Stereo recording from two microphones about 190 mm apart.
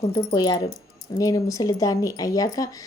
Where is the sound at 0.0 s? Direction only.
25° left (ahead or behind).